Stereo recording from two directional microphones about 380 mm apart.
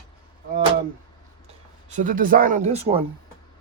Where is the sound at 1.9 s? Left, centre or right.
Centre.